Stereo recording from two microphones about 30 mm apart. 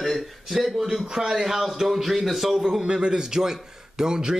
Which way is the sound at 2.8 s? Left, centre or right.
Right.